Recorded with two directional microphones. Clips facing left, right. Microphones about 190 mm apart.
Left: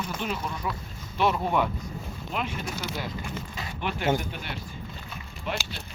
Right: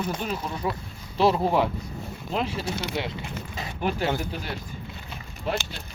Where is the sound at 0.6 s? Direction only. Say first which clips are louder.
Right 4 dB; 25° right (ahead or behind).